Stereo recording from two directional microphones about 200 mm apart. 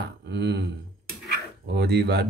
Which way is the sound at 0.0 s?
55° right (ahead or behind).